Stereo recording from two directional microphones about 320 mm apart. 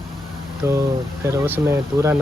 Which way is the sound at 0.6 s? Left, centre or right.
Centre.